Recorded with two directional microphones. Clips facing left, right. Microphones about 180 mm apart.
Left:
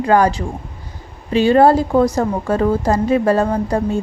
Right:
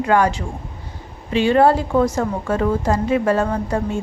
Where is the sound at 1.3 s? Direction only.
40° left (ahead or behind).